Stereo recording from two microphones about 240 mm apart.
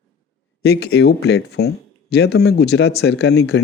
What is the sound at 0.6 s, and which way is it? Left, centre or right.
Speech, left.